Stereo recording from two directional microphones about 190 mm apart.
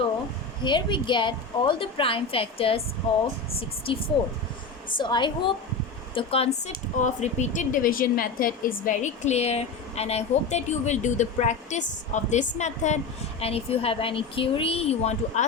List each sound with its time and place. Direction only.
0.6 s a woman's voice: 25° left (ahead or behind)
4.9 s a woman's voice: 25° left (ahead or behind)